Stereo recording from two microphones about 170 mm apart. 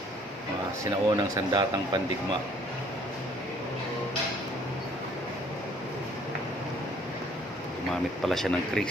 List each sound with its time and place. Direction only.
0.9 s speech: 25° right (ahead or behind)
7.9 s speech: centre (ahead or behind)